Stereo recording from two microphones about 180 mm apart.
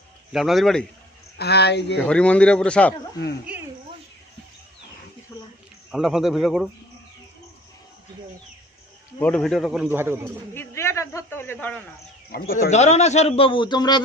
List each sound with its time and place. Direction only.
0.3 s a man's voice: centre (ahead or behind)
1.4 s speech: 65° left (ahead or behind)
2.0 s a man's voice: 5° left (ahead or behind)
5.9 s a man's voice: centre (ahead or behind)
9.2 s a man's voice: 5° left (ahead or behind); by 10.3 s 10° right (ahead or behind)
10.5 s a man's voice: 15° left (ahead or behind)
12.3 s speech: 60° left (ahead or behind)
12.7 s a man's voice: 40° left (ahead or behind); by 14.0 s 25° left (ahead or behind)